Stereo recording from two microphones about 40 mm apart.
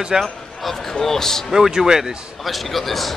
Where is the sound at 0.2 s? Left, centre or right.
Centre.